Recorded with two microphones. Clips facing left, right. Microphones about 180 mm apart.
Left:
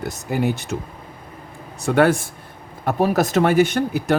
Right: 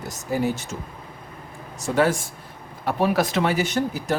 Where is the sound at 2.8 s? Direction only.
45° left (ahead or behind); by 4.1 s 60° left (ahead or behind).